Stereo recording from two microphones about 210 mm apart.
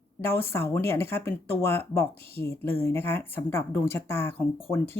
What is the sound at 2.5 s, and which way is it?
Speech, 10° left (ahead or behind).